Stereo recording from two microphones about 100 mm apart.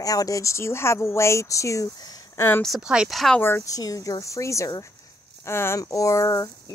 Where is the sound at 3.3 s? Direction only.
25° left (ahead or behind).